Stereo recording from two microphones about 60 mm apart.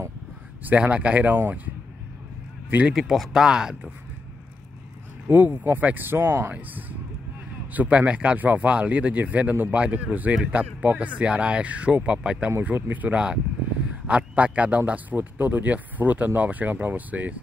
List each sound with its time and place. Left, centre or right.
0.7 s speech: right
2.9 s speech: centre
5.3 s speech: right
6.5 s speech: right
12.4 s speech: right